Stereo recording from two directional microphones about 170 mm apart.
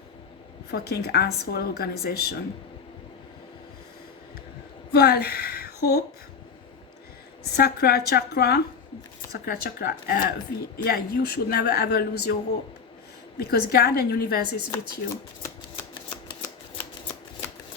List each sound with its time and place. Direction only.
0.7 s speech: 70° left (ahead or behind)
4.9 s a woman's voice: 65° left (ahead or behind)
7.5 s a woman's voice: 65° left (ahead or behind)
14.7 s shuffling cards: 15° left (ahead or behind)